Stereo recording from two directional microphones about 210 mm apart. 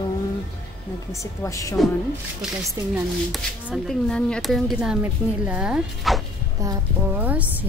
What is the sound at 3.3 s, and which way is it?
A woman's voice, centre (ahead or behind).